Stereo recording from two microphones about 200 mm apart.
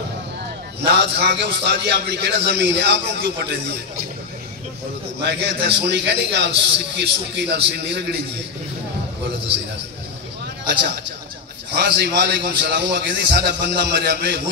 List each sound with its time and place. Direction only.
0.8 s a man's voice: 55° right (ahead or behind)
5.2 s a man's voice: 60° right (ahead or behind)
11.7 s a man's voice: 55° right (ahead or behind)